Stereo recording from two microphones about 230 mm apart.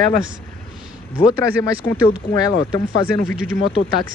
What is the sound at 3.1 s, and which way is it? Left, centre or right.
Speech, right.